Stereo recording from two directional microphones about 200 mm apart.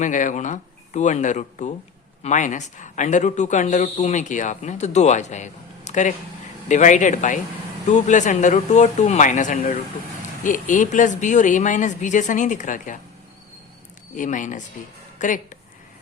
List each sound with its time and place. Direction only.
0.0 s speech: 40° left (ahead or behind)
14.2 s speech: 40° left (ahead or behind)